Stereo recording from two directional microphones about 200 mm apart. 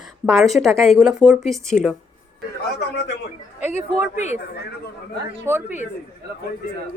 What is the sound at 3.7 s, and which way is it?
Speech, 35° left (ahead or behind).